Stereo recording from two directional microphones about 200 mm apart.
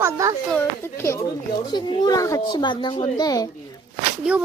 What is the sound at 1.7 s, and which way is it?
Speech, 20° left (ahead or behind).